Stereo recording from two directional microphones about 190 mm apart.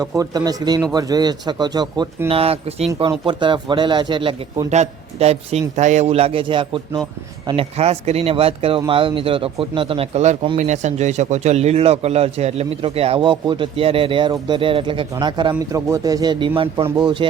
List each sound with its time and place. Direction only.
0.0 s speech: 20° right (ahead or behind)